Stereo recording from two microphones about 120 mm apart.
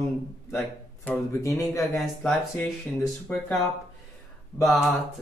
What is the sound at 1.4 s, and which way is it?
Speech, 25° left (ahead or behind).